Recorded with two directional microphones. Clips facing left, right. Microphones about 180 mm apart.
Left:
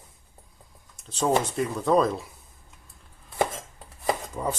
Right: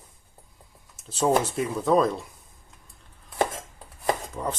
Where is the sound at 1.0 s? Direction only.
5° right (ahead or behind).